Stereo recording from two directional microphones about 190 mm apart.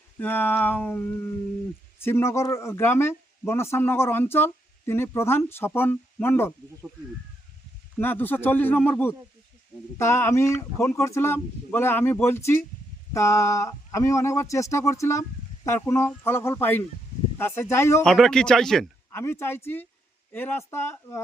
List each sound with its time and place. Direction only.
0.2 s speech: 10° left (ahead or behind)
7.9 s speech: 10° left (ahead or behind)
18.0 s a man's voice: 5° left (ahead or behind)